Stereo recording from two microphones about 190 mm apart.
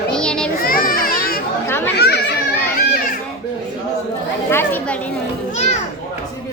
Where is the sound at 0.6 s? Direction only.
50° left (ahead or behind).